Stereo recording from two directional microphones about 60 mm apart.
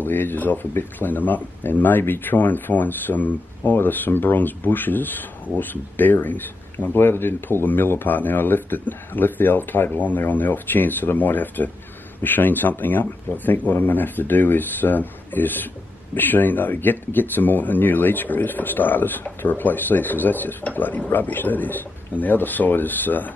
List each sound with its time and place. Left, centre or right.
0.0 s speech: left